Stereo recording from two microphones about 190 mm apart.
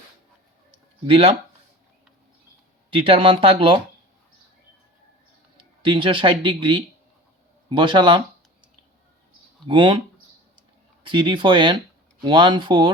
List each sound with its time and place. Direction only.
1.0 s speech: 30° right (ahead or behind)
2.9 s speech: 30° right (ahead or behind)
5.8 s speech: 25° right (ahead or behind)
9.6 s speech: 25° right (ahead or behind)
11.0 s speech: 25° right (ahead or behind)